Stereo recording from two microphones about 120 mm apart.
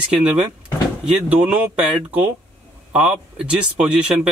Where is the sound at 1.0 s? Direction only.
10° right (ahead or behind).